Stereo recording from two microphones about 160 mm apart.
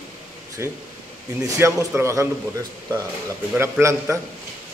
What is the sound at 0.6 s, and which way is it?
Speech, 15° right (ahead or behind).